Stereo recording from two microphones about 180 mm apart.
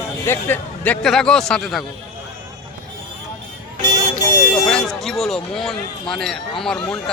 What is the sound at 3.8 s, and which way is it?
Vehicle, 15° left (ahead or behind).